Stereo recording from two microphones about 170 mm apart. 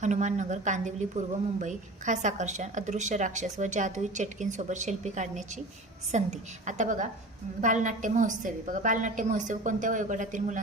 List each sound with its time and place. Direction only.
0.0 s a woman's voice: 45° right (ahead or behind)